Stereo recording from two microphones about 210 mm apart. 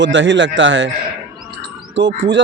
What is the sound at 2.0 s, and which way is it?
Speech, 60° right (ahead or behind).